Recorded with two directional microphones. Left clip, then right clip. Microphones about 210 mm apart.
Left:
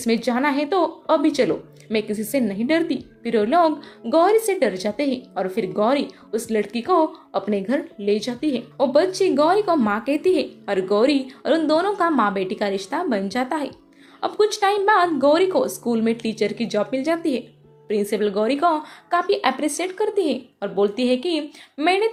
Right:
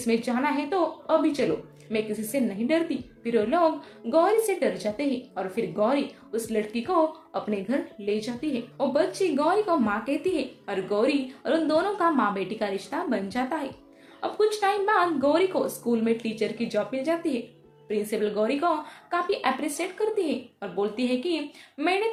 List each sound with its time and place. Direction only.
0.0 s a woman's voice: 40° left (ahead or behind)